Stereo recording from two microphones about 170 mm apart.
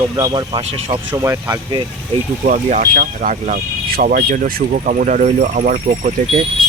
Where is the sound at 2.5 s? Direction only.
45° right (ahead or behind).